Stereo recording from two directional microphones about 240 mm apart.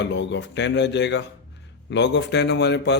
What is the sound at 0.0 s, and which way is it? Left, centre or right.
A man's voice, left.